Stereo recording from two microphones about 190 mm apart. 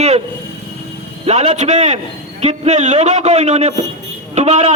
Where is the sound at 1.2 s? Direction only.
35° right (ahead or behind).